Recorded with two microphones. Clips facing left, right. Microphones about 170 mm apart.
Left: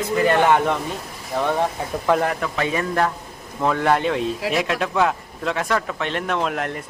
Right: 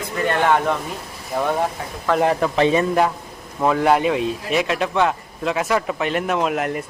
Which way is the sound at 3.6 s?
10° right (ahead or behind).